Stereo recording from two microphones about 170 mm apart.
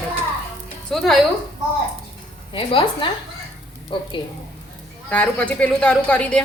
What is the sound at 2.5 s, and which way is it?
A woman's voice, 30° left (ahead or behind).